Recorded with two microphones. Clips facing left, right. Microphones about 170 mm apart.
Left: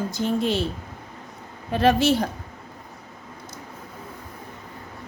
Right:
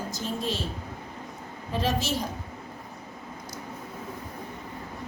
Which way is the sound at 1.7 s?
65° left (ahead or behind).